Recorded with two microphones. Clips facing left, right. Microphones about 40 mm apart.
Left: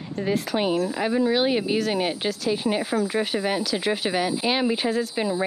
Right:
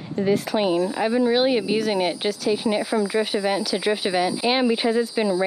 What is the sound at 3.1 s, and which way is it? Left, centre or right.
Speech, left.